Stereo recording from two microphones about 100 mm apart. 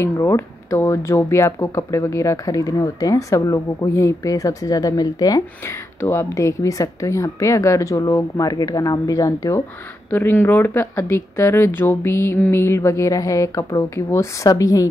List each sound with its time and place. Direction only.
0.0 s speech: 30° left (ahead or behind)
5.9 s speech: 25° left (ahead or behind)
10.1 s speech: 20° left (ahead or behind)